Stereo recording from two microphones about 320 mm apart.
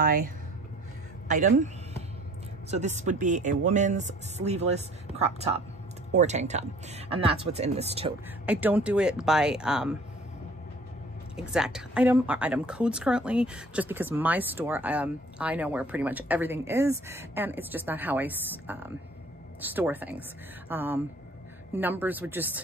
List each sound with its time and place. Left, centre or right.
0.0 s speech: right
3.0 s speech: right
8.5 s a woman's voice: centre
11.3 s a woman's voice: centre